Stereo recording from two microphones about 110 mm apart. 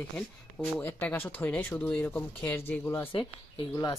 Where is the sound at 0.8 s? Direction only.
15° left (ahead or behind).